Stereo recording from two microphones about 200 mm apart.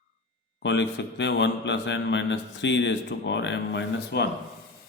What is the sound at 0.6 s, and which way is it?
A man's voice, 65° left (ahead or behind).